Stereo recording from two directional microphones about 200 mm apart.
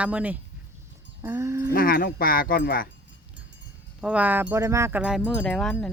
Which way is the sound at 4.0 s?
5° right (ahead or behind).